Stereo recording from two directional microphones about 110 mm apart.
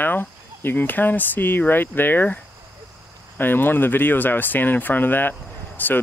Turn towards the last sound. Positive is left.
turn(degrees=15)  # may be behind; listen again after turning